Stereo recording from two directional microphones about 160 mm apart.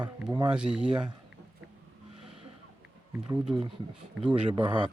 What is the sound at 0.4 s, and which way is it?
Speech, 5° right (ahead or behind).